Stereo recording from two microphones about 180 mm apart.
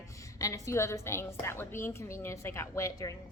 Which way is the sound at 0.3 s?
15° left (ahead or behind).